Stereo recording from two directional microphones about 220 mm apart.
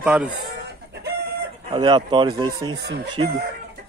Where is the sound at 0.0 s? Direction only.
5° right (ahead or behind).